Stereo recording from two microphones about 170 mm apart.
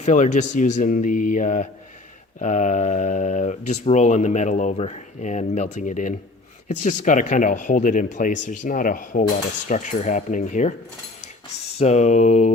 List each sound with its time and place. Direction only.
0.0 s speech: 45° left (ahead or behind)
11.8 s speech: 40° left (ahead or behind)